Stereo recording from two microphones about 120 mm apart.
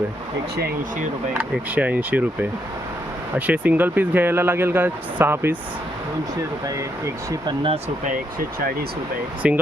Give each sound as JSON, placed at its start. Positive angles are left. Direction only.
{"t": 1.3, "sound": "speech", "side_deg": -10}
{"t": 7.4, "sound": "speech", "side_deg": -45}
{"t": 9.4, "sound": "speech", "side_deg": -10}